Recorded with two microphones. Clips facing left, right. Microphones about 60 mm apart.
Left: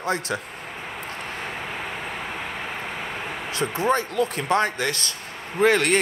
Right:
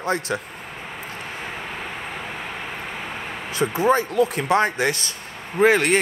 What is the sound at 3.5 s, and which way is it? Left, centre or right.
Speech, centre.